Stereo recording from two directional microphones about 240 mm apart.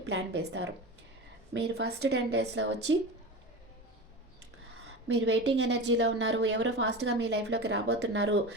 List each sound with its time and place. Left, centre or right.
0.0 s a woman's voice: right
5.0 s a woman's voice: right